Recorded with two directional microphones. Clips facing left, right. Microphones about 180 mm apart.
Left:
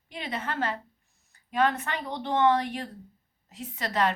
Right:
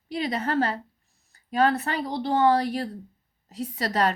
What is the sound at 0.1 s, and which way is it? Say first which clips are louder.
A woman's voice: right 7 dB; 40° right (ahead or behind).